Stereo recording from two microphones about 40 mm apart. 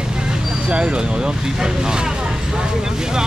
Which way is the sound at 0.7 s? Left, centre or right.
Right.